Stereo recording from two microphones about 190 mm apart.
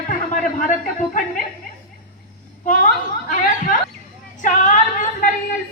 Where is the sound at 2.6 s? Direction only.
45° left (ahead or behind).